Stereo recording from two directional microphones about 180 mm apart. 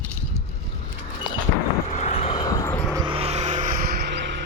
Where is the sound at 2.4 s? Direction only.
20° left (ahead or behind).